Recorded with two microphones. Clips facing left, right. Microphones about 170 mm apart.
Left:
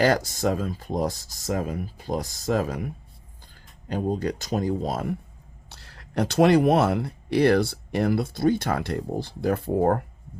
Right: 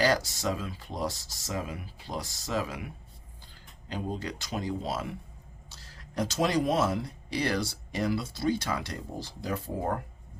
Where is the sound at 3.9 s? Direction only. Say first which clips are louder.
Left 8 dB; 45° left (ahead or behind).